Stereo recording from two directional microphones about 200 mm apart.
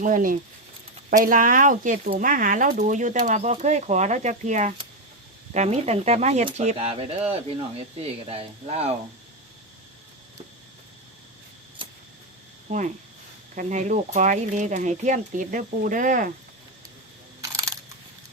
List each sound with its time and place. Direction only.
0.0 s speech: 40° right (ahead or behind)
11.8 s a sound: 25° right (ahead or behind)
12.7 s speech: 35° right (ahead or behind)
17.4 s crushing: 15° right (ahead or behind)